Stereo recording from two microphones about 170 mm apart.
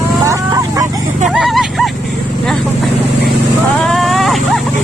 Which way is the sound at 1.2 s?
Centre (ahead or behind).